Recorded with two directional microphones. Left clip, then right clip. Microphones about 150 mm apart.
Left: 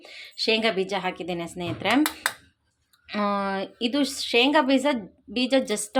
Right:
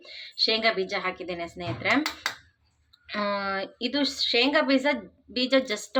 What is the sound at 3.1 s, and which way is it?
Speech, 40° left (ahead or behind).